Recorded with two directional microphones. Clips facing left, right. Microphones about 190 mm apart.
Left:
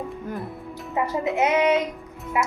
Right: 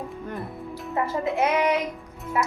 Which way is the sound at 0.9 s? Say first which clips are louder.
Left 1 dB; 15° left (ahead or behind).